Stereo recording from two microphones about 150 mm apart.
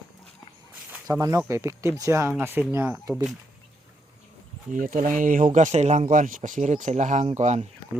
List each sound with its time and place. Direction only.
1.2 s speech: 20° right (ahead or behind)
4.7 s speech: 60° right (ahead or behind)
5.5 s speech: 50° right (ahead or behind)